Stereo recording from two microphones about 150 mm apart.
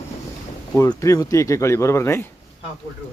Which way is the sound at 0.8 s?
20° left (ahead or behind).